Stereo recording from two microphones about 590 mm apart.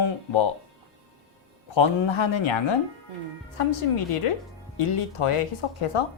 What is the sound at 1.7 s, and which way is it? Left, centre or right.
Speech, left.